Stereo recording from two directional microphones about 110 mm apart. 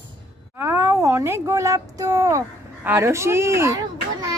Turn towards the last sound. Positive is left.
turn(degrees=-35)  # may be behind; listen again after turning